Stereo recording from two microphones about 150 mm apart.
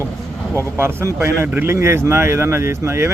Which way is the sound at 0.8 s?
15° right (ahead or behind).